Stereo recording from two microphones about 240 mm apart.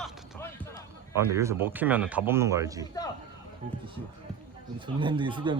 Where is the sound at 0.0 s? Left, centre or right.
Centre.